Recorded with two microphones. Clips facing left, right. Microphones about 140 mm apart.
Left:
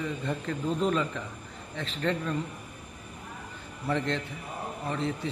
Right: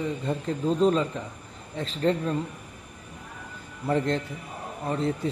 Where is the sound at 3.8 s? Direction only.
40° right (ahead or behind).